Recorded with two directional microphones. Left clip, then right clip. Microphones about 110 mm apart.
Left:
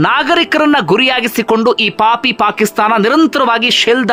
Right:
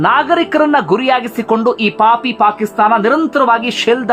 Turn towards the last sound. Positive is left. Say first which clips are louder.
# left 3 dB
turn(degrees=25)  # may be behind; listen again after turning